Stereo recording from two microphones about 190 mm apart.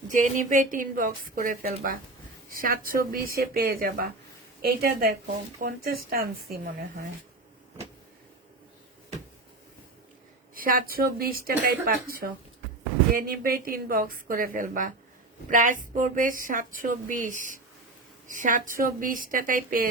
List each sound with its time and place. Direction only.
0.1 s a woman's voice: 45° right (ahead or behind)
10.5 s a woman's voice: 50° right (ahead or behind)